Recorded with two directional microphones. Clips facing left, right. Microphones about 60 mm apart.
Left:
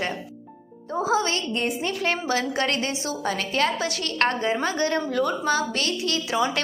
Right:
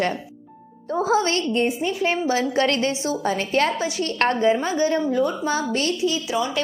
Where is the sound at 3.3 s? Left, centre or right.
Right.